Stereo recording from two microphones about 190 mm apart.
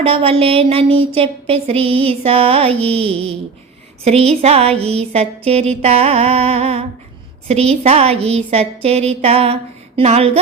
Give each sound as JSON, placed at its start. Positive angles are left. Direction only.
{"t": 0.0, "sound": "a woman's voice", "side_deg": -30}